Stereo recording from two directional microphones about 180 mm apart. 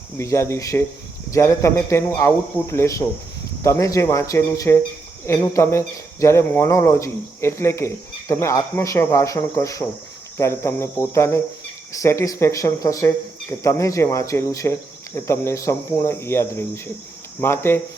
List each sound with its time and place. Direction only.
0.2 s speech: 15° left (ahead or behind)